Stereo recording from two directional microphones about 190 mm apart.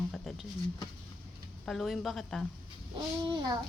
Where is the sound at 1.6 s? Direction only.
Centre (ahead or behind).